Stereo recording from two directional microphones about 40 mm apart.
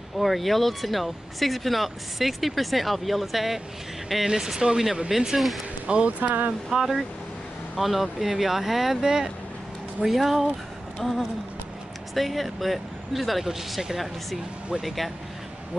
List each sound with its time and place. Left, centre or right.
0.2 s speech: centre
4.3 s speech: centre
5.9 s speech: right
6.7 s speech: centre